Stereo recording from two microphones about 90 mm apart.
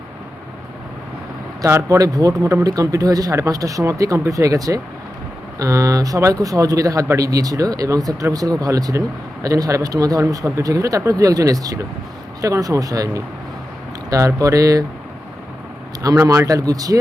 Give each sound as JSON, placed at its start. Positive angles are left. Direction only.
{"t": 1.6, "sound": "speech", "side_deg": -35}
{"t": 16.0, "sound": "speech", "side_deg": -35}